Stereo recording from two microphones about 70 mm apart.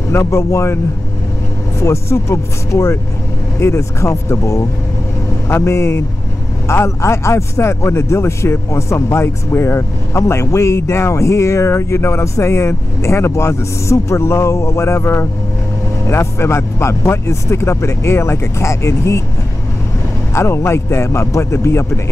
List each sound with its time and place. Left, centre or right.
0.1 s speech: left
1.8 s speech: left
20.3 s speech: left